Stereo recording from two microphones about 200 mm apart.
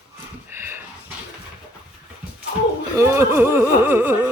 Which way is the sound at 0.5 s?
10° right (ahead or behind).